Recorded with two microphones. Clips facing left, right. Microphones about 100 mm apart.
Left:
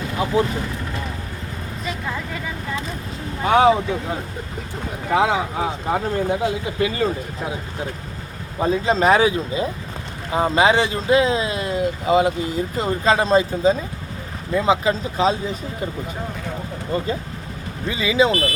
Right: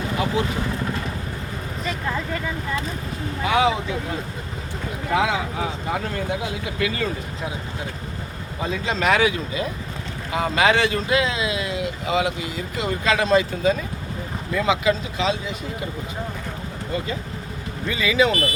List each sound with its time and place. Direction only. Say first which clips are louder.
1.8 s speech: right 1 dB; 5° left (ahead or behind)
3.4 s speech: left 5 dB; 45° left (ahead or behind)
5.1 s speech: left 3 dB; 30° left (ahead or behind)
8.5 s speech: left 7 dB; 40° left (ahead or behind)
17.8 s speech: left 2 dB; 25° left (ahead or behind)